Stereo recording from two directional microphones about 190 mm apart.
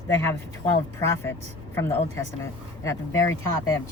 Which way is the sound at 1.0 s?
15° left (ahead or behind).